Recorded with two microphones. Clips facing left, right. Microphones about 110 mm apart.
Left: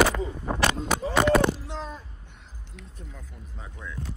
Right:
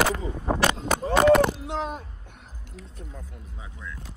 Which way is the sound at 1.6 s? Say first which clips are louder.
Right 6 dB; 65° right (ahead or behind).